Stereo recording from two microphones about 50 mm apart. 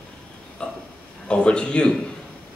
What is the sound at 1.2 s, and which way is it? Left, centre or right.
Speech, centre.